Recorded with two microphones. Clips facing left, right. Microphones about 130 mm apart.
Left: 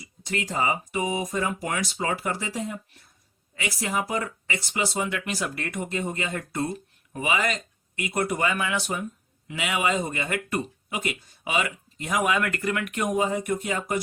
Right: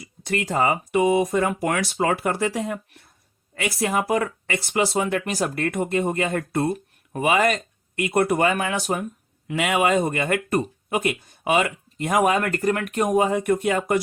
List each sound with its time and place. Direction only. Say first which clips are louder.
0.0 s speech: right 5 dB; 55° right (ahead or behind)
3.5 s speech: right 5 dB; 55° right (ahead or behind); by 13.1 s 40° right (ahead or behind)
13.1 s speech: right 6 dB; 60° right (ahead or behind)